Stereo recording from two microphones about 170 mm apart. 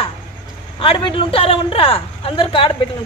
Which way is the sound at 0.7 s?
30° left (ahead or behind).